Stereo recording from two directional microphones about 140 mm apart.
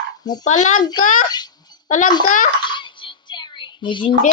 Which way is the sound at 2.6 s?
35° left (ahead or behind).